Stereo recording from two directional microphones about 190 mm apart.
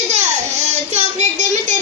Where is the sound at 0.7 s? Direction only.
35° right (ahead or behind).